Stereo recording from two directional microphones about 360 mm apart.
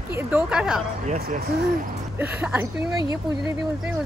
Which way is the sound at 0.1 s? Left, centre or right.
Centre.